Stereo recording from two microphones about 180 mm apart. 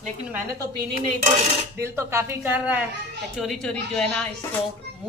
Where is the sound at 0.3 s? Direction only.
15° right (ahead or behind).